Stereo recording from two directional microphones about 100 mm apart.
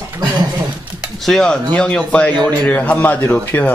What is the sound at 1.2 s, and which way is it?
Speech, 5° left (ahead or behind).